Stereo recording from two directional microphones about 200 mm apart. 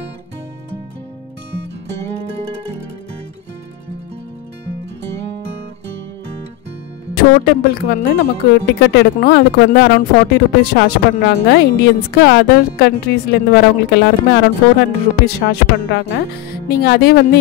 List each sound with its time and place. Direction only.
7.2 s speech: 50° left (ahead or behind)
8.7 s speech: 60° left (ahead or behind)